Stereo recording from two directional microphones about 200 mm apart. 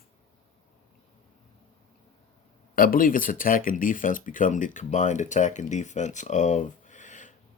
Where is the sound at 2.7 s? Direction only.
45° left (ahead or behind).